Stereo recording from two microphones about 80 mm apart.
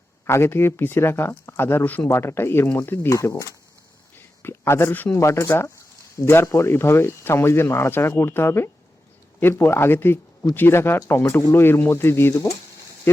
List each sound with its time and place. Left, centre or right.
0.3 s speech: left
4.4 s speech: left
5.1 s speech: left